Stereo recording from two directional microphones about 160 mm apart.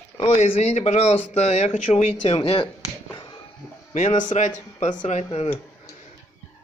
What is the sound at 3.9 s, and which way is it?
Speech, 50° left (ahead or behind).